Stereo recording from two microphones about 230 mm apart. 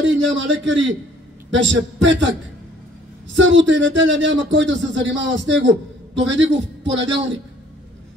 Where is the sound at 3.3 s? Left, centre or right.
Right.